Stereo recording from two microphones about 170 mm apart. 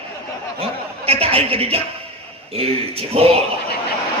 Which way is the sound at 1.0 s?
35° right (ahead or behind).